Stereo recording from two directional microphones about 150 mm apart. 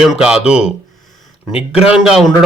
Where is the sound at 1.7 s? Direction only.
5° right (ahead or behind).